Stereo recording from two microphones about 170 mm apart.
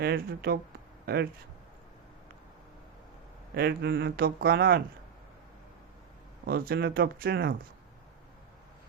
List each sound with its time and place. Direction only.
0.0 s speech: 65° right (ahead or behind)
3.5 s speech: 70° right (ahead or behind)
6.4 s speech: 65° right (ahead or behind)